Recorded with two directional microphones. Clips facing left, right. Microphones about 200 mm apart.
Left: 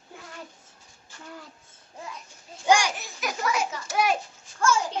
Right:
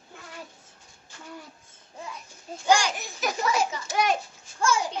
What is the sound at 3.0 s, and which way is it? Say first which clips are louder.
Speech: right 2 dB; 25° right (ahead or behind).